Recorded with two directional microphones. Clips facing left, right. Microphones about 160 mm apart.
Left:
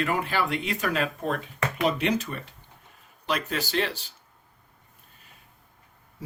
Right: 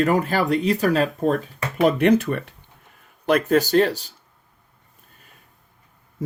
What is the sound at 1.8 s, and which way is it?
Speech, 55° right (ahead or behind).